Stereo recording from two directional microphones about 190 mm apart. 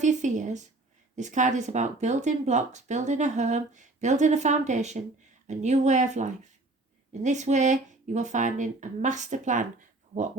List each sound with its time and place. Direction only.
0.0 s speech: 40° right (ahead or behind)